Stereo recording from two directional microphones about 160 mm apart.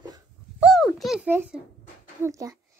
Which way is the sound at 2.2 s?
20° right (ahead or behind).